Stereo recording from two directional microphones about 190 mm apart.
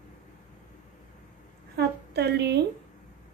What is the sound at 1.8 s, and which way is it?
Speech, 60° right (ahead or behind).